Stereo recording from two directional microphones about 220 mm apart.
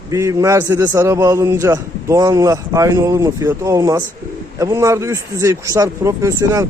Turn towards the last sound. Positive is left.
turn(degrees=-15)  # may be behind; listen again after turning